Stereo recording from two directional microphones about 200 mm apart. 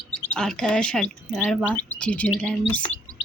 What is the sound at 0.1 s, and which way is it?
Speech, 5° left (ahead or behind).